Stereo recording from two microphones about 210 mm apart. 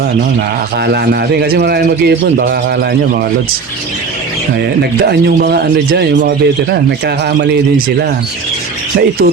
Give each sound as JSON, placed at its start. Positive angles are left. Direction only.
{"t": 0.9, "sound": "speech", "side_deg": -50}
{"t": 5.0, "sound": "speech", "side_deg": -50}